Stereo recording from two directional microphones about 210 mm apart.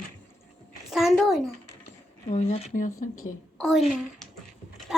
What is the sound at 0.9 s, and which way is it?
Speech, centre (ahead or behind).